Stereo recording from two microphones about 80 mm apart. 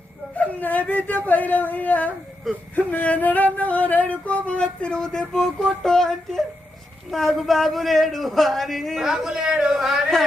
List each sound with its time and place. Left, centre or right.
0.3 s speech: centre
1.3 s a sound: left
5.8 s speech: centre